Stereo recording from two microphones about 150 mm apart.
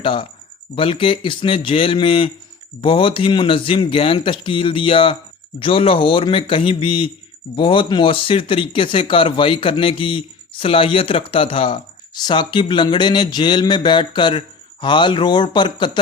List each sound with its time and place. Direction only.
0.0 s speech: 35° left (ahead or behind)